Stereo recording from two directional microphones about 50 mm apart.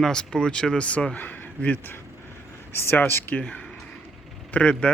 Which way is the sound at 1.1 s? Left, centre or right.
Left.